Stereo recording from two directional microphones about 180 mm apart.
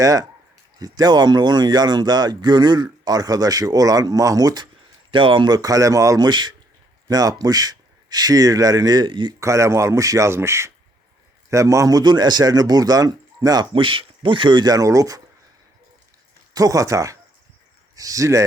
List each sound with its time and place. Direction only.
0.0 s speech: 20° right (ahead or behind)
16.6 s speech: 20° right (ahead or behind)